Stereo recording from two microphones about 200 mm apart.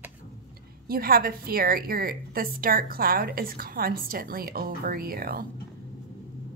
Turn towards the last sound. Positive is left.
turn(degrees=-45)  # may be behind; listen again after turning